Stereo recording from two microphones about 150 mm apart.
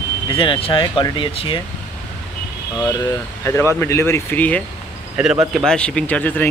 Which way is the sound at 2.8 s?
20° left (ahead or behind).